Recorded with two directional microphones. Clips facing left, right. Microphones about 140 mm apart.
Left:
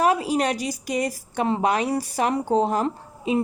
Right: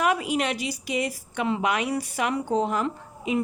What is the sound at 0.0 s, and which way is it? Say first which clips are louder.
A woman's voice: left 3 dB; 35° left (ahead or behind).